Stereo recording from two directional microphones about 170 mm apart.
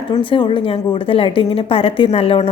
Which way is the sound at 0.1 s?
30° left (ahead or behind).